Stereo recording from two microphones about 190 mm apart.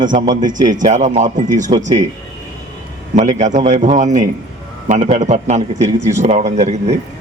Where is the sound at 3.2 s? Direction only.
40° right (ahead or behind).